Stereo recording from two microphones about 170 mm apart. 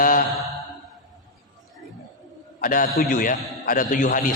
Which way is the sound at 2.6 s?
55° left (ahead or behind).